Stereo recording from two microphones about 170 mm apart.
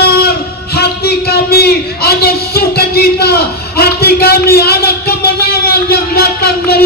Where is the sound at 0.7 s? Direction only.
70° left (ahead or behind).